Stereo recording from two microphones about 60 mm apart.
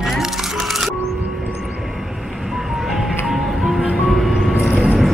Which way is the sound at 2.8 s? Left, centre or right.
Centre.